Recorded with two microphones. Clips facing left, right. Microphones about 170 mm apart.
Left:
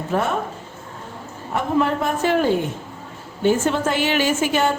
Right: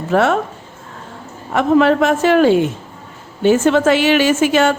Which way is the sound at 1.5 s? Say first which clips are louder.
Right 8 dB; 90° right.